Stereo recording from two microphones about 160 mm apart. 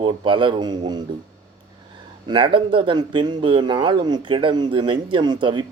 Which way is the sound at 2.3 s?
30° right (ahead or behind).